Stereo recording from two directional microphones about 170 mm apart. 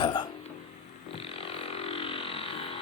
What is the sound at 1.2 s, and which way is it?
Vehicle, 35° left (ahead or behind).